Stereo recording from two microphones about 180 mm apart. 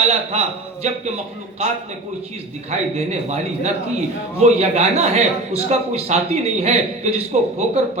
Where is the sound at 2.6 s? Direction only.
40° right (ahead or behind).